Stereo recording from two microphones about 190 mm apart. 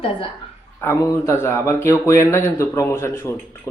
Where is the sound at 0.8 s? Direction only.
15° left (ahead or behind).